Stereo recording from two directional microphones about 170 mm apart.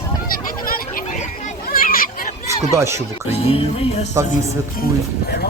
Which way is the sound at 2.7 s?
15° right (ahead or behind).